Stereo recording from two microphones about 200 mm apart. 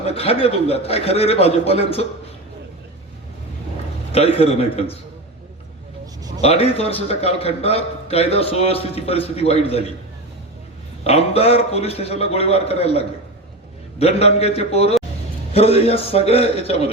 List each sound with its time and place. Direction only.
0.0 s a man's voice: 30° left (ahead or behind)
4.1 s a man's voice: 30° left (ahead or behind)
6.4 s a man's voice: 30° left (ahead or behind)
11.0 s a man's voice: 30° left (ahead or behind)